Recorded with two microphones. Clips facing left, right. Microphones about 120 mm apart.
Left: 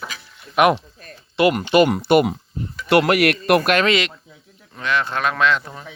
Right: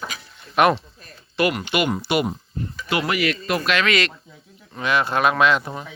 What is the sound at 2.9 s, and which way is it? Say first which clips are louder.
Speech: left 7 dB; 65° left (ahead or behind).